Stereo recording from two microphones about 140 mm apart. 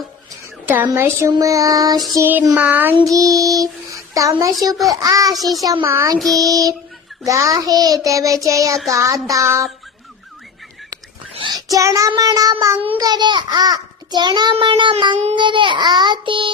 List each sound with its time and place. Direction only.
0.9 s child singing: 20° right (ahead or behind)
2.1 s a sound: 15° right (ahead or behind)
3.0 s child singing: 25° right (ahead or behind)
6.1 s child singing: centre (ahead or behind)
6.4 s child singing: 25° right (ahead or behind)
11.5 s child singing: 25° right (ahead or behind)
13.0 s a child's voice: 30° right (ahead or behind)